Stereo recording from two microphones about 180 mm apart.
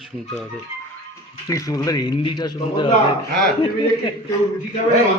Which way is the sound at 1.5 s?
20° left (ahead or behind).